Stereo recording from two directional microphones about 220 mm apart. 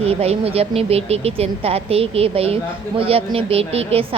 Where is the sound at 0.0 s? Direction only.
25° right (ahead or behind).